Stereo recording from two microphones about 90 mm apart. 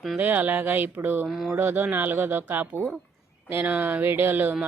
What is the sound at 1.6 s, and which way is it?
A woman's voice, 20° right (ahead or behind).